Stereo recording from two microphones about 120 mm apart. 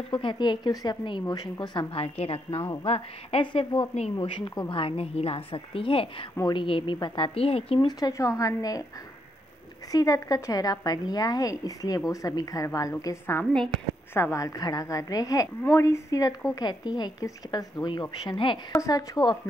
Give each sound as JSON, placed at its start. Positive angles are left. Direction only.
{"t": 0.2, "sound": "a woman's voice", "side_deg": 40}
{"t": 7.3, "sound": "a woman's voice", "side_deg": 55}
{"t": 7.8, "sound": "a woman's voice", "side_deg": 30}
{"t": 9.8, "sound": "a woman's voice", "side_deg": 30}
{"t": 18.8, "sound": "speech", "side_deg": 30}